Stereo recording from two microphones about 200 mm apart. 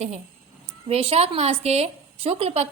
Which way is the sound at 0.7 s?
30° right (ahead or behind).